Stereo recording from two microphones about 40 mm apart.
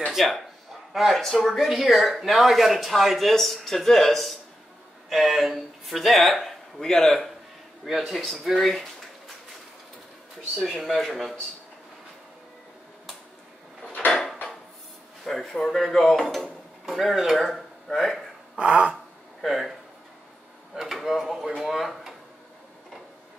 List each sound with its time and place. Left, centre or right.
0.1 s speech: centre
8.0 s speech: centre
10.5 s speech: centre
15.4 s speech: centre
18.6 s a sound: right
19.4 s speech: centre
20.7 s speech: centre